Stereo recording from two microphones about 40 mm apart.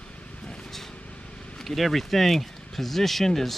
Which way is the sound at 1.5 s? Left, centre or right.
Centre.